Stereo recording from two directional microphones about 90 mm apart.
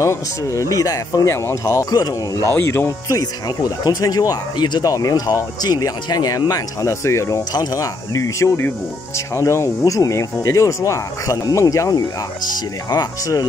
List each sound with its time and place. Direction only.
0.6 s speech: 40° left (ahead or behind)
2.5 s speech: 30° left (ahead or behind)
3.1 s speech: 40° left (ahead or behind)